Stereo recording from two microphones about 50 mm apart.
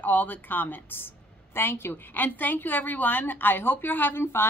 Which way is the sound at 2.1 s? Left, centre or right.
Left.